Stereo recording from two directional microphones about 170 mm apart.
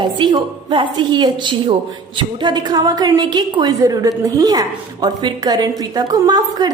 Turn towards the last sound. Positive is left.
turn(degrees=-25)  # may be behind; listen again after turning